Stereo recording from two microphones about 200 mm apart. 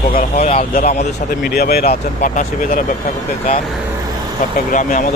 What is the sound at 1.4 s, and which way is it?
Speech, 50° left (ahead or behind).